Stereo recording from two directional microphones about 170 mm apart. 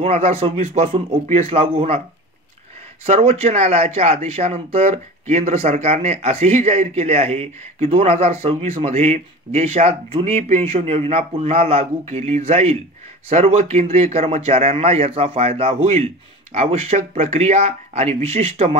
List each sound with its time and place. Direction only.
0.0 s speech: 40° right (ahead or behind)
3.1 s speech: 40° right (ahead or behind)